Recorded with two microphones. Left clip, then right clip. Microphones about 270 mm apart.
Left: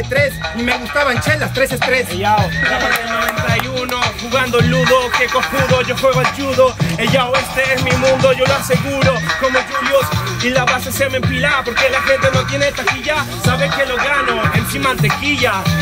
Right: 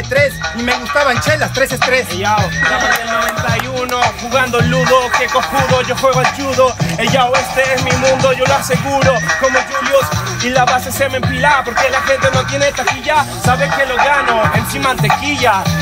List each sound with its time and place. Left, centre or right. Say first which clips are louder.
1.0 s music: right 3 dB; centre
2.2 s speech: left 1 dB; right
2.9 s music: right 2 dB; centre